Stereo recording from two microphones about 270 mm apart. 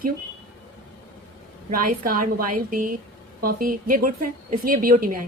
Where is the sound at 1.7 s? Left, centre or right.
Right.